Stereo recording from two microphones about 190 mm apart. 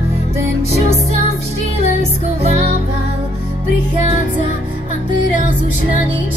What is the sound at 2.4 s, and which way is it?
Music, 35° right (ahead or behind).